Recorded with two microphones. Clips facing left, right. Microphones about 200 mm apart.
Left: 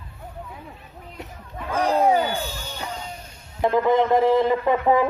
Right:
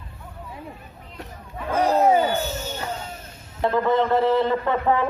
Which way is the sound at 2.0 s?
5° right (ahead or behind).